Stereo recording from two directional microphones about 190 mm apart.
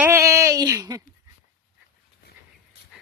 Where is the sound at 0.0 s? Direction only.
15° right (ahead or behind).